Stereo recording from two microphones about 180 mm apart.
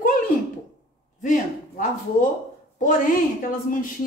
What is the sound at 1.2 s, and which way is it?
Speech, 45° left (ahead or behind).